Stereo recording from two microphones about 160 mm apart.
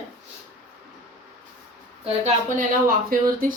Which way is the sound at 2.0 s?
35° right (ahead or behind).